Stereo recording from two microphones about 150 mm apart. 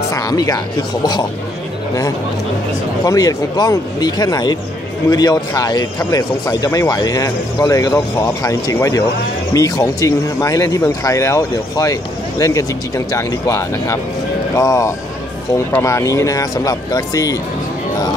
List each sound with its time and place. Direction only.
0.1 s speech: 25° left (ahead or behind)
3.0 s speech: 25° left (ahead or behind)